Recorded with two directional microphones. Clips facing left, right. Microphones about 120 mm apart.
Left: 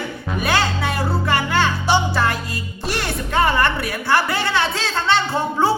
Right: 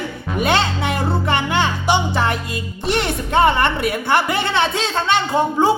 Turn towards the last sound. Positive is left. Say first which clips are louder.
# right 3 dB
turn(degrees=-15)  # may be behind; listen again after turning